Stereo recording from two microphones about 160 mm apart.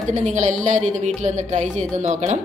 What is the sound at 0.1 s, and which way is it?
Speech, 50° right (ahead or behind).